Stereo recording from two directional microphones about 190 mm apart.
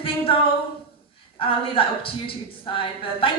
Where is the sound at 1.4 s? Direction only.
30° left (ahead or behind).